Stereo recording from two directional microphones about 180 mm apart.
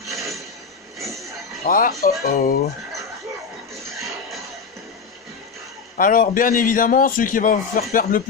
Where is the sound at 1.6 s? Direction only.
50° left (ahead or behind).